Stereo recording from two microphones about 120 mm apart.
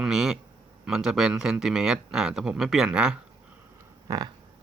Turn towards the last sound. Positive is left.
turn(degrees=-30)  # may be behind; listen again after turning